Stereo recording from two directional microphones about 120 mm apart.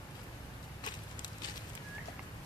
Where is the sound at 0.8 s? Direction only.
35° left (ahead or behind).